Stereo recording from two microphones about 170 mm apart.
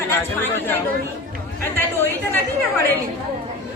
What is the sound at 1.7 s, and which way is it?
Speech, 10° left (ahead or behind).